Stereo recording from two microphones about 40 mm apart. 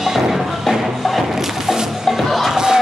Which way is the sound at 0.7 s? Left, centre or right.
Centre.